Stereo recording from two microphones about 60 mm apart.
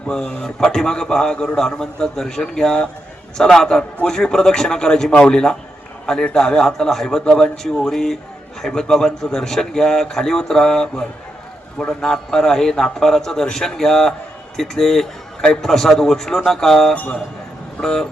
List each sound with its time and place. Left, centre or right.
0.4 s a man's voice: centre
16.9 s a man's voice: centre